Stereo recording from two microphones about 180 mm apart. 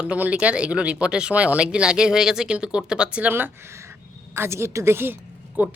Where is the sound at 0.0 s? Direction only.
5° right (ahead or behind).